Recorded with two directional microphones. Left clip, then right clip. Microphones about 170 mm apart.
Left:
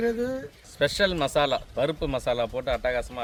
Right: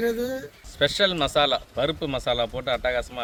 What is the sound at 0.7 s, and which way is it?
Speech, centre (ahead or behind).